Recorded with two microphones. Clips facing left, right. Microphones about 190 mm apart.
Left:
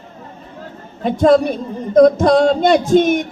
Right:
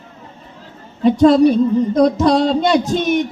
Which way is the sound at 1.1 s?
50° left (ahead or behind).